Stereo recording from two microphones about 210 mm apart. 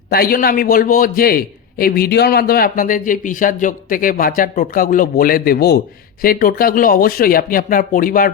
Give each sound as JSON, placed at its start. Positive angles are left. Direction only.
{"t": 0.1, "sound": "a man's voice", "side_deg": 45}